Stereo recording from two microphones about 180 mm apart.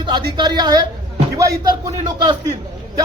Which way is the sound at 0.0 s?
25° right (ahead or behind).